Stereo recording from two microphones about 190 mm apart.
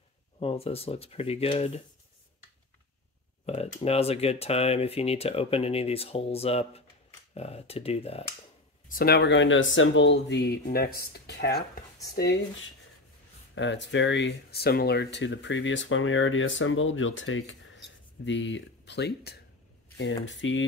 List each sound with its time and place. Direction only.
0.4 s speech: 30° left (ahead or behind)
3.4 s speech: 35° left (ahead or behind)
8.8 s speech: 50° left (ahead or behind)
13.6 s speech: 70° left (ahead or behind)
20.2 s speech: 80° left